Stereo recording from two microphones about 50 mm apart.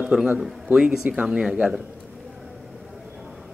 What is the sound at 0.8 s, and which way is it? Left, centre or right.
Speech, right.